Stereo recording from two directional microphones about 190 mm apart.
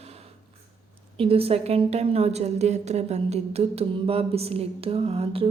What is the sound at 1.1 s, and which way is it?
A woman's voice, 30° right (ahead or behind).